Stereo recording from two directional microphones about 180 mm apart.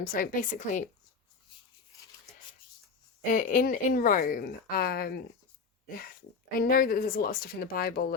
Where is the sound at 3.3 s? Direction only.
45° left (ahead or behind).